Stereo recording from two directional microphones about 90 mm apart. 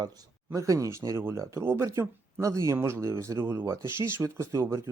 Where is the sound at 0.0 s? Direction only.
45° right (ahead or behind).